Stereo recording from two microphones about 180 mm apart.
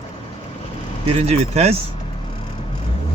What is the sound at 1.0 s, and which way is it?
Speech, 35° right (ahead or behind).